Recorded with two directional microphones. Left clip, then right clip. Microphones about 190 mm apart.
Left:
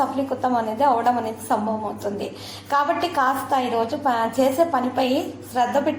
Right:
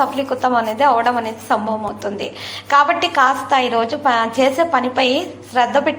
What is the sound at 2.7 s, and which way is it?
A woman's voice, 5° right (ahead or behind).